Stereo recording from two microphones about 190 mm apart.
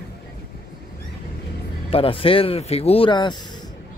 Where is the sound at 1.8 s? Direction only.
30° left (ahead or behind).